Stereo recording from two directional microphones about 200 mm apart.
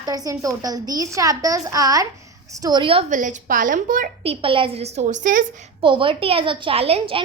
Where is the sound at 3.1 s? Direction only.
40° right (ahead or behind).